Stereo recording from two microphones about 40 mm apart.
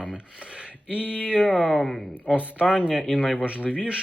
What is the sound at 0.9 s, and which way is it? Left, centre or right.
Speech, right.